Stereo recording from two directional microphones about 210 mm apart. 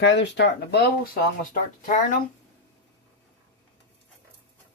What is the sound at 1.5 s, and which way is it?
Speech, 40° left (ahead or behind).